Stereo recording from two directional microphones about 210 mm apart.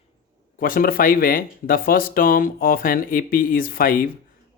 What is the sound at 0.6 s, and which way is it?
Speech, 45° left (ahead or behind).